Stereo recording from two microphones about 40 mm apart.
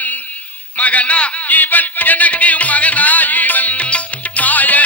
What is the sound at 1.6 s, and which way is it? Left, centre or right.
Music, left.